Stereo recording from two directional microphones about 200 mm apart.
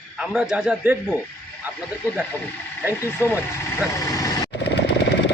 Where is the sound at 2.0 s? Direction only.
15° left (ahead or behind).